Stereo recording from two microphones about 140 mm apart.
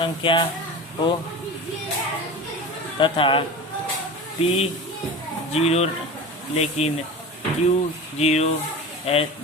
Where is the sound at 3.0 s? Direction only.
40° left (ahead or behind).